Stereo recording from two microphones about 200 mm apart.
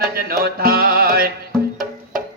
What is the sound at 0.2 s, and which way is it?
Music, 50° right (ahead or behind).